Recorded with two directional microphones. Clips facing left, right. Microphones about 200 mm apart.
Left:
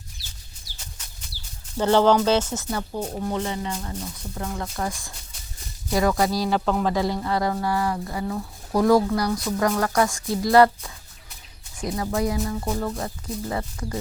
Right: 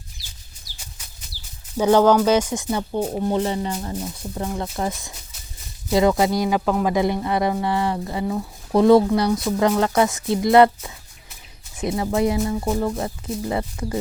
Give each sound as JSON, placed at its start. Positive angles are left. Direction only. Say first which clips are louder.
{"t": 1.8, "sound": "speech", "louder": "right 3 dB", "side_deg": -10}
{"t": 4.0, "sound": "speech", "louder": "right 4 dB", "side_deg": -20}
{"t": 6.5, "sound": "speech", "louder": "right 2 dB", "side_deg": -5}
{"t": 6.9, "sound": "speech", "louder": "right 3 dB", "side_deg": -20}